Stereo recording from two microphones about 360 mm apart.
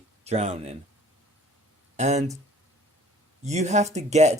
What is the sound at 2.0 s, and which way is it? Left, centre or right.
Speech, centre.